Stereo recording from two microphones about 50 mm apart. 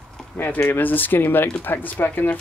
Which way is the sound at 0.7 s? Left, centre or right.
Left.